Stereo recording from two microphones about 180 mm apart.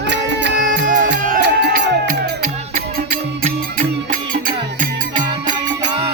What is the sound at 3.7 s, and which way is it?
Music, 50° right (ahead or behind).